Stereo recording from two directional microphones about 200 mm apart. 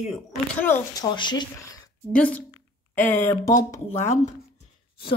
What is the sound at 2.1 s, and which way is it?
Speech, 5° left (ahead or behind).